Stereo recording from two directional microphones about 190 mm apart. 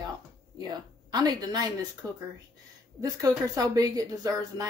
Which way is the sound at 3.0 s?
15° right (ahead or behind).